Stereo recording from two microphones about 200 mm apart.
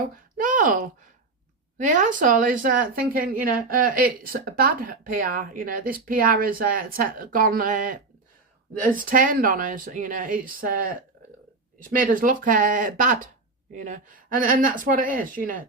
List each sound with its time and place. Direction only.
0.3 s a sound: 40° right (ahead or behind)
1.8 s a woman's voice: 40° right (ahead or behind)
11.9 s a woman's voice: 45° right (ahead or behind)